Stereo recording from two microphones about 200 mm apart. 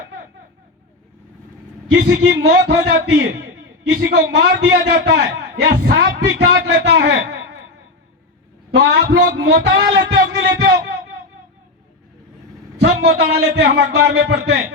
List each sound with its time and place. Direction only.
1.9 s a man's voice: 60° right (ahead or behind)
8.7 s a man's voice: 60° right (ahead or behind)
12.8 s a man's voice: 55° right (ahead or behind)